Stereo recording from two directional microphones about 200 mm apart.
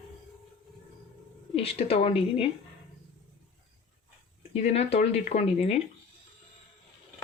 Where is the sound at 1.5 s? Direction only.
30° left (ahead or behind).